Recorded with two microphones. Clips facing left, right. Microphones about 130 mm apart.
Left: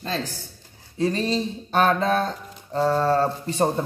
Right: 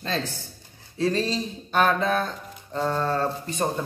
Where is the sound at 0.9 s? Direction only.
20° left (ahead or behind).